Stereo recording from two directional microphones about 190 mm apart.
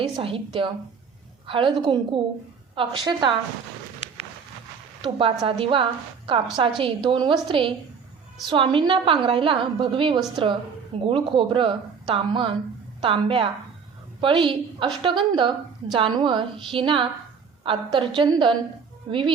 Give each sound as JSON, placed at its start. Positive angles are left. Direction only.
{"t": 0.2, "sound": "a woman's voice", "side_deg": -30}
{"t": 5.0, "sound": "a woman's voice", "side_deg": -25}